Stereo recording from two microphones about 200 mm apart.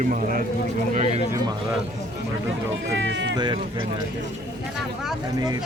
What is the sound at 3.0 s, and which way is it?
Speech, 65° right (ahead or behind).